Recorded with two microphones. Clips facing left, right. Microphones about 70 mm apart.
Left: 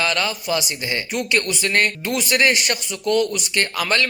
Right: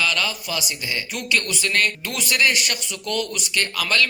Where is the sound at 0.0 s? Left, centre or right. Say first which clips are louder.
Left 2 dB; left.